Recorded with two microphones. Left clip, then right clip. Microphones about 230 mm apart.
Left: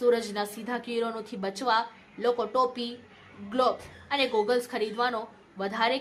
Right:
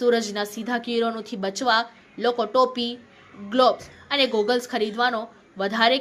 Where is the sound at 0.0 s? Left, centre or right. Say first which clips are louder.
Right 4 dB; centre.